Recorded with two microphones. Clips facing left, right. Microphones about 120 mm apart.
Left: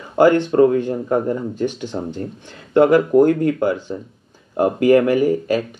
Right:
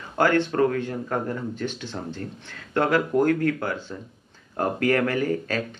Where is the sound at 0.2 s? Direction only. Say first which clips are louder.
Left 8 dB; 15° left (ahead or behind).